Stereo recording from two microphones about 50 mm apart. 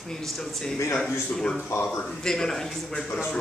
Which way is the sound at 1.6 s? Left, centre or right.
Left.